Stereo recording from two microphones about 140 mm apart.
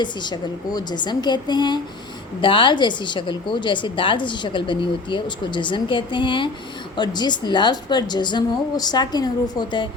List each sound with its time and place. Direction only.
0.0 s a woman's voice: 30° left (ahead or behind)